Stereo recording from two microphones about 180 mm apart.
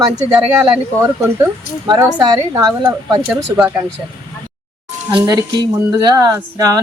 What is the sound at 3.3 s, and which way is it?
Speech, 5° right (ahead or behind).